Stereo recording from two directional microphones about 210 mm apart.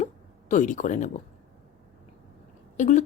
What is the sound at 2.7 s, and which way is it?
Speech, 35° left (ahead or behind).